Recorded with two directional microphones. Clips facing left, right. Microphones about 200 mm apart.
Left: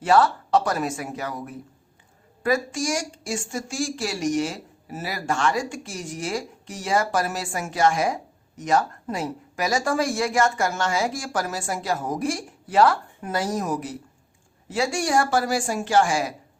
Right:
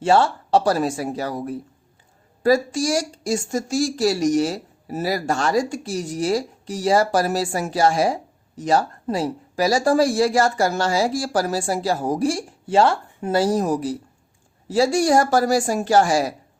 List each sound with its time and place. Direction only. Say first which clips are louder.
0.0 s speech: right 1 dB; 25° right (ahead or behind)